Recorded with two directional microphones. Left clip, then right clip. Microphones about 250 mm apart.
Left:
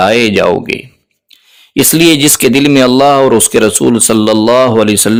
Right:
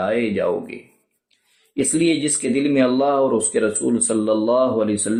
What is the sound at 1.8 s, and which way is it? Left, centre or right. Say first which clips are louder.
Speech: left 12 dB; left.